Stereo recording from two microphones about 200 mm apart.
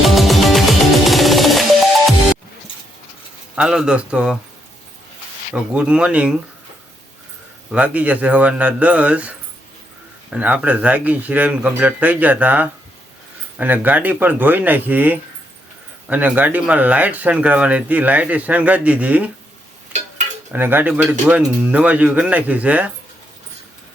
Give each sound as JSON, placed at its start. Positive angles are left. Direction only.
{"t": 0.1, "sound": "music", "side_deg": 0}
{"t": 3.5, "sound": "speech", "side_deg": -5}
{"t": 5.7, "sound": "speech", "side_deg": -5}
{"t": 7.7, "sound": "speech", "side_deg": -5}
{"t": 10.3, "sound": "speech", "side_deg": -5}
{"t": 20.5, "sound": "speech", "side_deg": -10}